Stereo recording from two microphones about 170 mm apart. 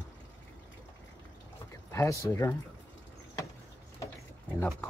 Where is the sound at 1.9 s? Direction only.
15° left (ahead or behind).